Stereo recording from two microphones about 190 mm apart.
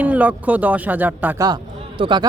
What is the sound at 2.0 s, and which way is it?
Speech, 25° right (ahead or behind).